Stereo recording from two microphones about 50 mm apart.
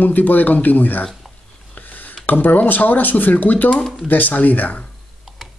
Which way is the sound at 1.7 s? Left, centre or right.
Left.